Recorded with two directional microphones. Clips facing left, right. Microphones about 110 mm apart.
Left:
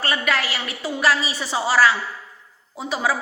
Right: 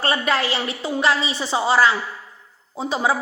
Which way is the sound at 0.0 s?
30° right (ahead or behind).